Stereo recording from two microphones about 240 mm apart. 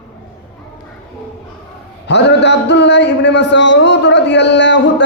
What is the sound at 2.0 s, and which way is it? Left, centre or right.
Speech, left.